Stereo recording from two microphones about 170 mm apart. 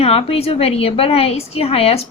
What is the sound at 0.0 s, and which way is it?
A woman's voice, 35° left (ahead or behind).